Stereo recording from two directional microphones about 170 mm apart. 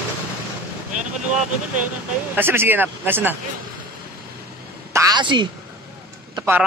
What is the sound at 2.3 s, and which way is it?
Speech, 15° right (ahead or behind).